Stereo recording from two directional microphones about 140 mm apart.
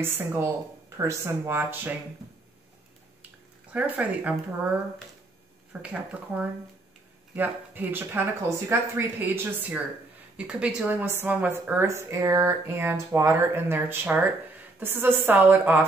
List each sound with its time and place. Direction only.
0.0 s a woman's voice: 15° right (ahead or behind)
3.7 s a woman's voice: 10° right (ahead or behind)
5.7 s a woman's voice: 10° right (ahead or behind)